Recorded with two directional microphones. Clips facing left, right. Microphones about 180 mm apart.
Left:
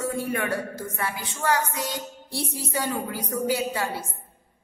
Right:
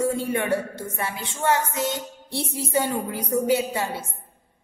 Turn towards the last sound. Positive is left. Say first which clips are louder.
# right 1 dB
turn(degrees=-25)  # may be behind; listen again after turning